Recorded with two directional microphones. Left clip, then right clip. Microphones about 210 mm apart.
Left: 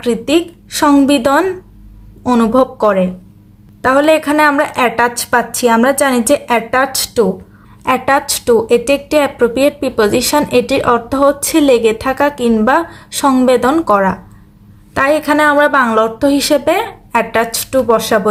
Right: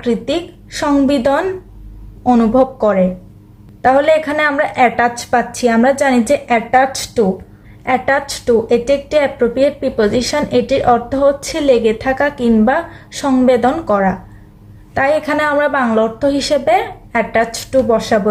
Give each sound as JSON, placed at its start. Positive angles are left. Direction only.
{"t": 0.0, "sound": "speech", "side_deg": 50}